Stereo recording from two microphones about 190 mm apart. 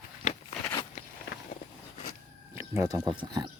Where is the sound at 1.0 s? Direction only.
35° left (ahead or behind).